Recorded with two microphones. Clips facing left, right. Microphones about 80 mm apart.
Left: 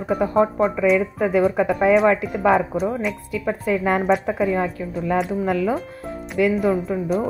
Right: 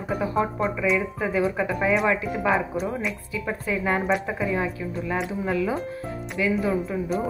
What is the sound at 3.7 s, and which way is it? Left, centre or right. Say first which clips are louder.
Speech: left 5 dB; left.